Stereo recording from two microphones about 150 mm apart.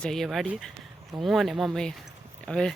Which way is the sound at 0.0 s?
Centre (ahead or behind).